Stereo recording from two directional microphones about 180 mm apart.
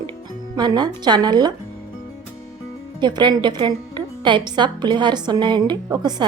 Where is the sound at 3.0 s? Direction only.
25° right (ahead or behind).